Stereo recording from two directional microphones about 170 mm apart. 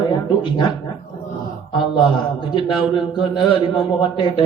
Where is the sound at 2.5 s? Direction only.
30° left (ahead or behind).